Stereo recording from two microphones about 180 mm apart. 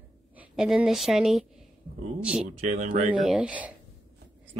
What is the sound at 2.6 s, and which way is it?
Speech, 40° right (ahead or behind).